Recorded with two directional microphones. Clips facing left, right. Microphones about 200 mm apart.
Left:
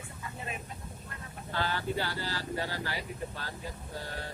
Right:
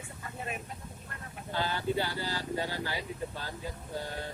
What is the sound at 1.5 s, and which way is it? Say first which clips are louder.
Speech: right 1 dB; 15° right (ahead or behind).